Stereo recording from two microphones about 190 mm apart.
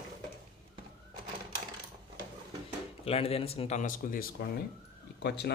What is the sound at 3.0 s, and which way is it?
Speech, 30° left (ahead or behind).